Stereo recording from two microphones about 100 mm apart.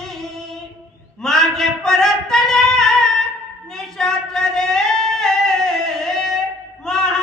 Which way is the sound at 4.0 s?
5° left (ahead or behind).